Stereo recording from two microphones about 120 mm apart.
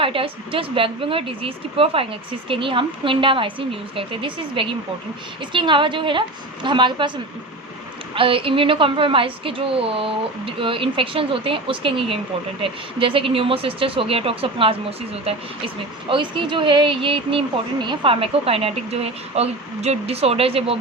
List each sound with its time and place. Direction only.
0.0 s speech: 50° right (ahead or behind)
8.1 s speech: 50° right (ahead or behind)